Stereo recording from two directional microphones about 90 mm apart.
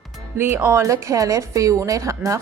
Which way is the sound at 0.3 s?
25° right (ahead or behind).